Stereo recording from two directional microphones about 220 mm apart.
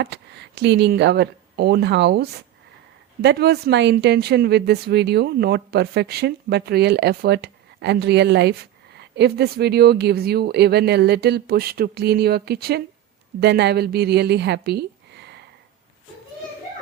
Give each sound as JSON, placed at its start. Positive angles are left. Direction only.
{"t": 0.0, "sound": "a woman's voice", "side_deg": -50}